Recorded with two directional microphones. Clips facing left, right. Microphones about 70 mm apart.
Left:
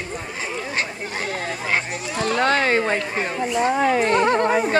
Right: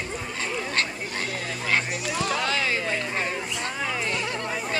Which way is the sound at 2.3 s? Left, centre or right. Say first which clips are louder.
Left 8 dB; left.